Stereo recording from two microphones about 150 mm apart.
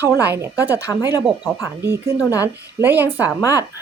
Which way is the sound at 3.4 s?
25° left (ahead or behind).